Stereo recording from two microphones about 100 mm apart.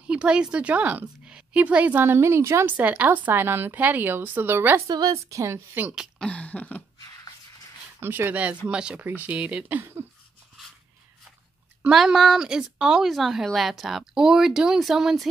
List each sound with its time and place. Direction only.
0.0 s a woman's voice: 10° right (ahead or behind)
4.8 s a woman's voice: 40° right (ahead or behind)
5.8 s speech: 15° right (ahead or behind)
6.1 s a sound: 10° left (ahead or behind)
8.0 s a woman's voice: 20° right (ahead or behind)
11.9 s speech: centre (ahead or behind)